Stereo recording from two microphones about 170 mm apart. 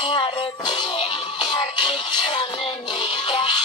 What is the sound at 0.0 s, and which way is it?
Music, 30° left (ahead or behind).